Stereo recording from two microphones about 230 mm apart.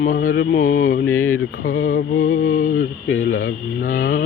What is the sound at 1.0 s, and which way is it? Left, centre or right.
Speech, left.